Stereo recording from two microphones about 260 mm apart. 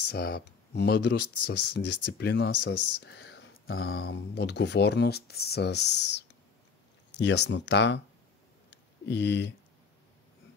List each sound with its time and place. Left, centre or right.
0.1 s speech: left
2.5 s speech: left
3.0 s a sound: left
3.7 s speech: left
4.0 s speech: left
8.6 s a sound: left